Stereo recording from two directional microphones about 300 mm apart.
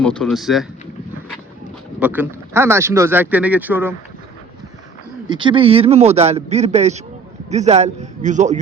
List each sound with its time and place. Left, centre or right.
0.0 s speech: centre
2.0 s speech: centre
5.3 s a man's voice: centre